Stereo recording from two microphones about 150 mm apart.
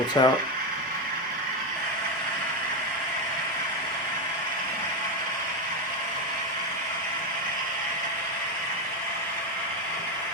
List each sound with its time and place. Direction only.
0.2 s speech: 30° left (ahead or behind)